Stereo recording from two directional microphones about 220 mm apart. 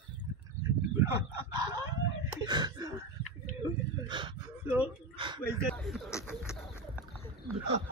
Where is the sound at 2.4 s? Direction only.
20° right (ahead or behind).